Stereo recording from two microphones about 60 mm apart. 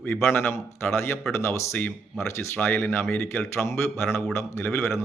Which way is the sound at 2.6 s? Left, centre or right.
Left.